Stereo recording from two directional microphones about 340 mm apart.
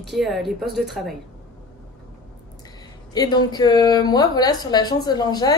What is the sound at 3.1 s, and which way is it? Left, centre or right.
A woman's voice, centre.